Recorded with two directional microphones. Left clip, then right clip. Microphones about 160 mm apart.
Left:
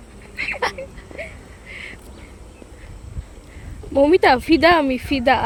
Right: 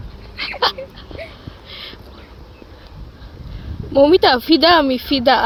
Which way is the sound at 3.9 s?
5° left (ahead or behind).